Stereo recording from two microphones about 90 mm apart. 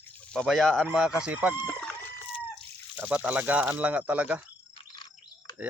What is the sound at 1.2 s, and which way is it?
Speech, 15° right (ahead or behind).